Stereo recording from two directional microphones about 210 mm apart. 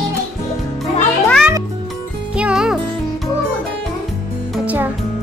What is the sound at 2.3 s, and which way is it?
Music, 5° right (ahead or behind).